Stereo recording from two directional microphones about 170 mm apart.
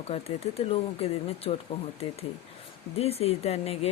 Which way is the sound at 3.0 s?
35° left (ahead or behind).